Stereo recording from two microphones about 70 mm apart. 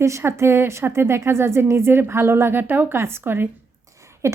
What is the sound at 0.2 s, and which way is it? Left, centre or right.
A woman's voice, right.